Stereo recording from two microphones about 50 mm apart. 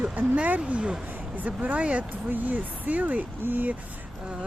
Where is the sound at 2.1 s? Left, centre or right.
Right.